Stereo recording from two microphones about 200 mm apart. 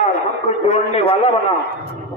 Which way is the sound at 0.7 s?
30° left (ahead or behind).